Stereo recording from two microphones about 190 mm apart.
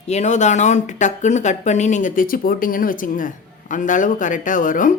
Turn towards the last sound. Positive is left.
turn(degrees=45)  # may be behind; listen again after turning